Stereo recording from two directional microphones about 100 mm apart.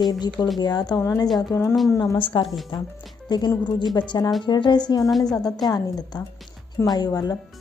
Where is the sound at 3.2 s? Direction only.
45° left (ahead or behind).